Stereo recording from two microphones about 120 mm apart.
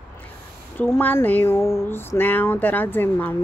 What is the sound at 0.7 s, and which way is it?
Speech, 15° left (ahead or behind).